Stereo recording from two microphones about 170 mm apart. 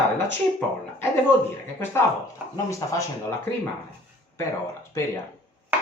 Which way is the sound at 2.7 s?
20° left (ahead or behind).